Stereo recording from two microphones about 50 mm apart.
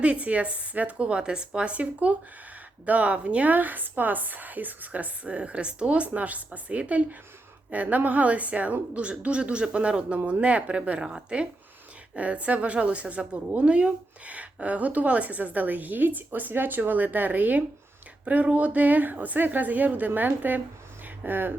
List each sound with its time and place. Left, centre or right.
0.0 s a woman's voice: right